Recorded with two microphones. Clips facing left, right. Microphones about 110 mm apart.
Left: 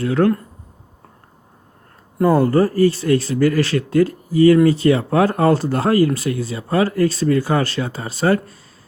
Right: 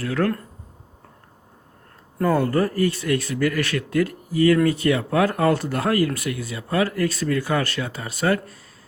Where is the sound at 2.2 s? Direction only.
30° left (ahead or behind).